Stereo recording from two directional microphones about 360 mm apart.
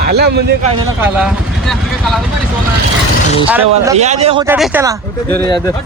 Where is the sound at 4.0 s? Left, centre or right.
Centre.